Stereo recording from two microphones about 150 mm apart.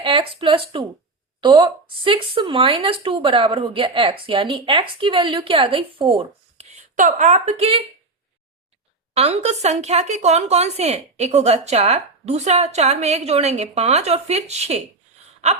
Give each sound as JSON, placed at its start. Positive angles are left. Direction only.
{"t": 0.0, "sound": "speech", "side_deg": -35}
{"t": 6.9, "sound": "a woman's voice", "side_deg": -60}
{"t": 9.1, "sound": "a woman's voice", "side_deg": -45}
{"t": 15.4, "sound": "gasp", "side_deg": -50}